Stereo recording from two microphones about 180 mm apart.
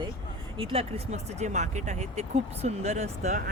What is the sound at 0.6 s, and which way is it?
Speech, 30° right (ahead or behind).